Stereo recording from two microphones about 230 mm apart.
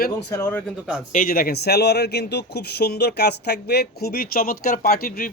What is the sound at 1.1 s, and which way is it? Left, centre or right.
A man's voice, left.